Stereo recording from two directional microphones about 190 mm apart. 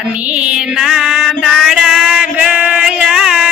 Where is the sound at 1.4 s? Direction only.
Centre (ahead or behind).